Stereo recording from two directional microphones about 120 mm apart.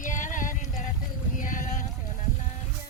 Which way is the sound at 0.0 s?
90° left.